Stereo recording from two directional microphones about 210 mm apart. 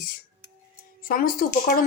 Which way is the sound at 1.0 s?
45° left (ahead or behind).